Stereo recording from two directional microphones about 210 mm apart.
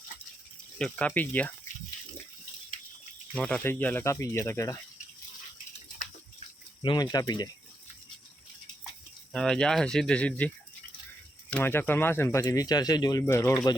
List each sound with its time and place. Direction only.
0.8 s speech: 5° left (ahead or behind)
3.3 s speech: 5° left (ahead or behind)
6.8 s speech: 20° left (ahead or behind)
9.3 s speech: 5° left (ahead or behind)
11.5 s speech: 10° left (ahead or behind)